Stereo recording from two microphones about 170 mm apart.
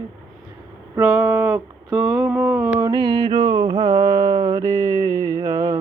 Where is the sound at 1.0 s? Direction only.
5° right (ahead or behind).